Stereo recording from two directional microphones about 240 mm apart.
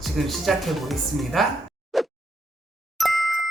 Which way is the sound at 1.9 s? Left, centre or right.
Centre.